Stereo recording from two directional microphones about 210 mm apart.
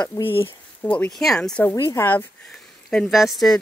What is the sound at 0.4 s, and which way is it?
A woman's voice, 5° left (ahead or behind).